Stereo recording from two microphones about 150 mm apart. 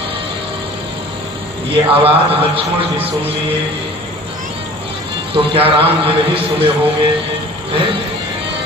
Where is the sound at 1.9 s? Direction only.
40° right (ahead or behind).